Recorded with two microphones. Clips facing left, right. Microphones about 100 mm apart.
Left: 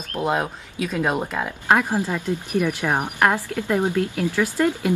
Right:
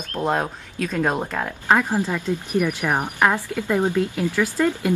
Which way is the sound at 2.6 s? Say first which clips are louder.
Even; 20° left (ahead or behind).